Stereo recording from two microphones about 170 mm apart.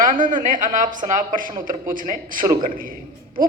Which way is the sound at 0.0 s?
50° right (ahead or behind).